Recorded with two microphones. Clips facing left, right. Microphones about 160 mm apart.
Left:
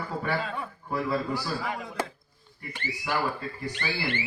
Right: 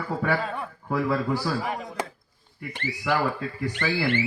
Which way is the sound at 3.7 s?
60° right (ahead or behind).